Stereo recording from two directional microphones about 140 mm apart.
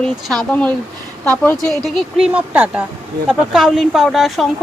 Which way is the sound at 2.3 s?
10° right (ahead or behind).